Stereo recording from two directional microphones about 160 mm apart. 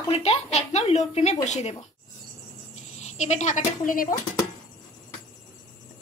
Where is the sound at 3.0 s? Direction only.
45° left (ahead or behind).